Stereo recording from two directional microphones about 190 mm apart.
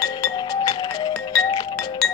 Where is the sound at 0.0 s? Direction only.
20° left (ahead or behind).